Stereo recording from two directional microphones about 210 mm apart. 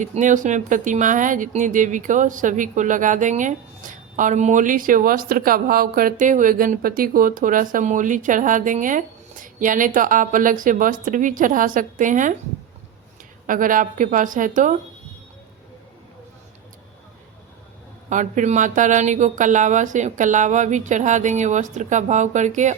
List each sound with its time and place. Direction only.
0.0 s speech: 35° right (ahead or behind)
13.5 s speech: 40° right (ahead or behind)
18.1 s speech: 35° right (ahead or behind)